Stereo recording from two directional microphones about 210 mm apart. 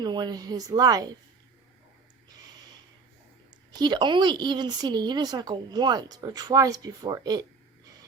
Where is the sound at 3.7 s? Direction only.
20° right (ahead or behind).